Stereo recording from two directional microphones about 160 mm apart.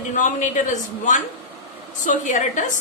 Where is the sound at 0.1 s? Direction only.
50° left (ahead or behind).